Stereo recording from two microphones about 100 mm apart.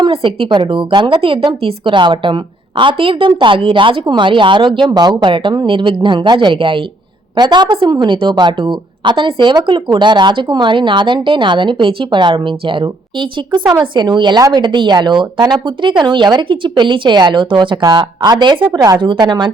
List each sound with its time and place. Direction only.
0.0 s a woman's voice: 60° right (ahead or behind)
4.9 s speech: 45° right (ahead or behind)
7.3 s speech: 45° right (ahead or behind)
17.7 s speech: 45° right (ahead or behind)
18.7 s speech: 35° right (ahead or behind)
19.2 s speech: 50° right (ahead or behind)